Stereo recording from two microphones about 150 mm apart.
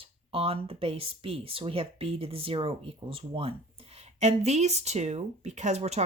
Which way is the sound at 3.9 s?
50° right (ahead or behind).